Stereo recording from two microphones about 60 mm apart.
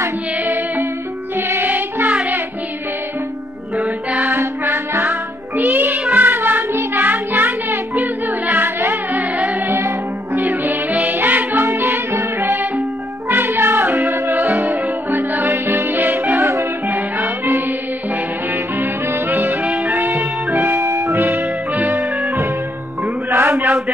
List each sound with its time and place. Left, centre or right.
0.4 s music: right
3.7 s music: centre
4.2 s music: right
5.0 s music: right
7.7 s music: right
8.3 s music: right
10.6 s music: right
16.3 s music: right
19.6 s music: centre
19.9 s music: right
22.0 s music: centre
23.0 s music: right